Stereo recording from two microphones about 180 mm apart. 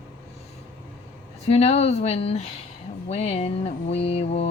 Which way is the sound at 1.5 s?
35° left (ahead or behind).